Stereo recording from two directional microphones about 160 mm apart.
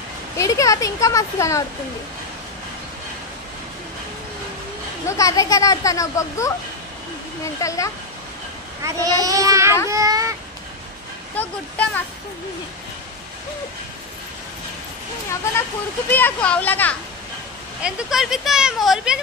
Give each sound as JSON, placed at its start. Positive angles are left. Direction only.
{"t": 0.4, "sound": "speech", "side_deg": 20}
{"t": 5.0, "sound": "speech", "side_deg": 20}
{"t": 7.6, "sound": "speech", "side_deg": 20}
{"t": 8.8, "sound": "a child's voice", "side_deg": -20}
{"t": 11.3, "sound": "speech", "side_deg": 10}
{"t": 16.1, "sound": "speech", "side_deg": 10}
{"t": 17.8, "sound": "speech", "side_deg": -5}